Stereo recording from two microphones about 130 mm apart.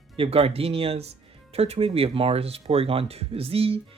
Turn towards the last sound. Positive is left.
turn(degrees=-45)  # may be behind; listen again after turning